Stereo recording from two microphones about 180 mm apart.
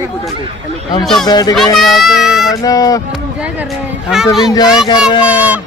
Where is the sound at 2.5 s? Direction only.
20° left (ahead or behind).